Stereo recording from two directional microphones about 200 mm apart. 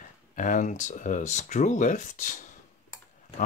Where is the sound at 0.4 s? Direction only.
40° left (ahead or behind).